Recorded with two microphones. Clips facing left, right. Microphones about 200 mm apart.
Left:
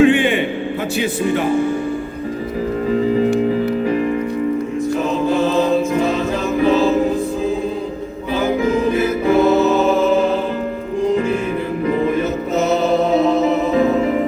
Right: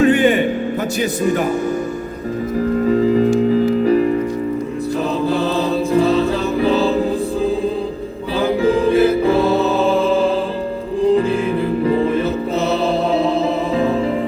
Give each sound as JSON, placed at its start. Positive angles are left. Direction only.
{"t": 0.0, "sound": "music", "side_deg": -40}
{"t": 0.9, "sound": "speech", "side_deg": -40}
{"t": 5.2, "sound": "music", "side_deg": -35}